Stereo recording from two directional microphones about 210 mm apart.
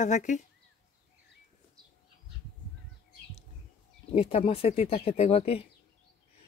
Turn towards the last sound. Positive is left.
turn(degrees=30)  # may be behind; listen again after turning